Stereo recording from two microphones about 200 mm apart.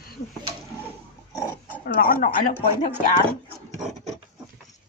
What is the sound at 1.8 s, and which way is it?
Speech, 45° left (ahead or behind).